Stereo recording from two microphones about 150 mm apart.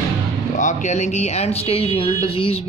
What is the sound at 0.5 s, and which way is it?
Speech, 55° left (ahead or behind).